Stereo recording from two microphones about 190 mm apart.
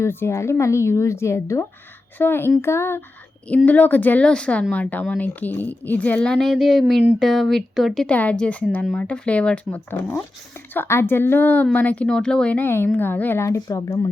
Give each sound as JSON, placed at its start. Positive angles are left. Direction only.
{"t": 0.0, "sound": "speech", "side_deg": 15}